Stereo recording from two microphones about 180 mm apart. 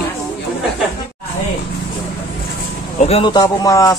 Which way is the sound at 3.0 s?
30° left (ahead or behind).